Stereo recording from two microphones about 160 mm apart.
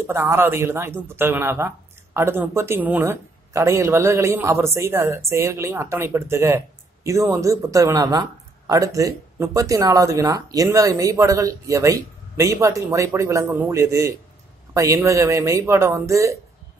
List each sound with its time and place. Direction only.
0.0 s speech: 15° right (ahead or behind)